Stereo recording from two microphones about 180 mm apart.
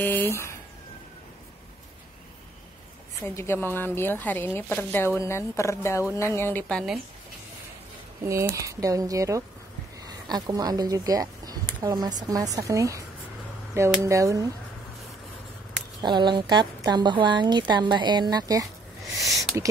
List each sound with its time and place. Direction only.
0.0 s speech: 10° left (ahead or behind)
3.3 s speech: 15° left (ahead or behind)
8.2 s a woman's voice: 15° right (ahead or behind)
16.0 s a woman's voice: 25° right (ahead or behind)